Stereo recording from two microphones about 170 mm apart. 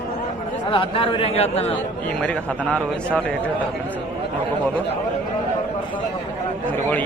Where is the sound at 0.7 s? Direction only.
30° left (ahead or behind).